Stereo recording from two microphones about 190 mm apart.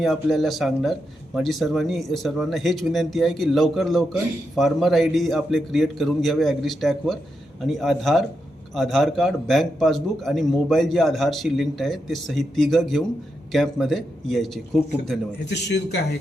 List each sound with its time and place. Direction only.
0.0 s speech: centre (ahead or behind)
15.4 s a man's voice: 65° left (ahead or behind)